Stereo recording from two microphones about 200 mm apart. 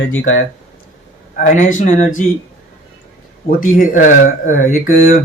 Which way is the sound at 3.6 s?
40° left (ahead or behind).